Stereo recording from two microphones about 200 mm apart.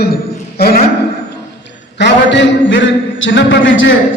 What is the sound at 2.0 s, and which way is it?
A man's voice, 60° left (ahead or behind).